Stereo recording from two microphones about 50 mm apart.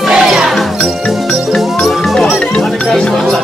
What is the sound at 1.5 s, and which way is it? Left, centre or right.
Music, centre.